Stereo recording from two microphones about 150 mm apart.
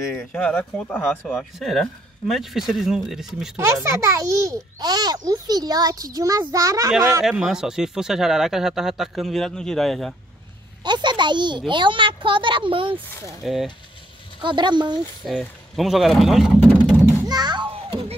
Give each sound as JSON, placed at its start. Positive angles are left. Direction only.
{"t": 0.3, "sound": "speech", "side_deg": 5}
{"t": 3.5, "sound": "a child's voice", "side_deg": -20}
{"t": 7.2, "sound": "speech", "side_deg": -5}
{"t": 10.8, "sound": "a child's voice", "side_deg": -30}
{"t": 13.4, "sound": "speech", "side_deg": 0}
{"t": 14.4, "sound": "a child's voice", "side_deg": -30}
{"t": 15.2, "sound": "speech", "side_deg": 0}
{"t": 17.3, "sound": "a sound", "side_deg": -30}